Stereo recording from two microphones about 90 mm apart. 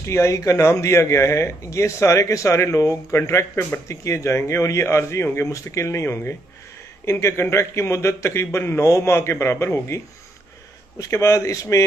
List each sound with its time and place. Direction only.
0.0 s speech: 30° left (ahead or behind)